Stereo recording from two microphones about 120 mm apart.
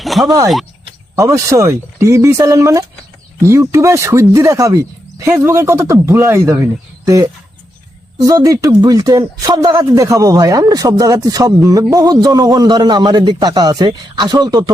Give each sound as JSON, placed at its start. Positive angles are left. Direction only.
{"t": 0.0, "sound": "a sound", "side_deg": 0}
{"t": 1.1, "sound": "speech", "side_deg": -25}
{"t": 8.2, "sound": "a man's voice", "side_deg": -30}